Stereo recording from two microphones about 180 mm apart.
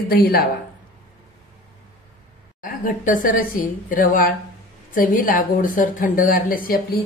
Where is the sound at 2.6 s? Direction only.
45° left (ahead or behind).